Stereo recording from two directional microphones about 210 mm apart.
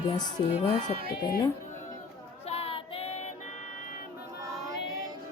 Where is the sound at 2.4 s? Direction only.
30° left (ahead or behind).